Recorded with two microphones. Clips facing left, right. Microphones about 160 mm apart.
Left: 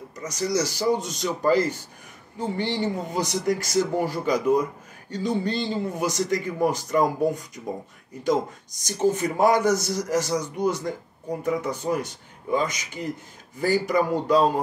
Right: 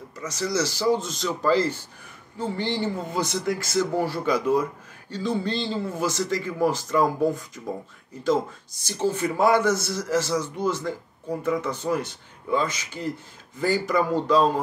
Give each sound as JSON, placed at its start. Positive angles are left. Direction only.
{"t": 0.3, "sound": "a man's voice", "side_deg": 15}